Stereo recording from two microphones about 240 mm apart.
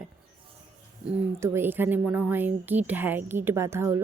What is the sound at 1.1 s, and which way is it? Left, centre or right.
Speech, centre.